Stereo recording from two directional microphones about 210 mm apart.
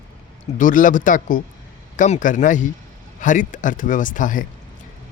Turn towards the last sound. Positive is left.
turn(degrees=40)  # may be behind; listen again after turning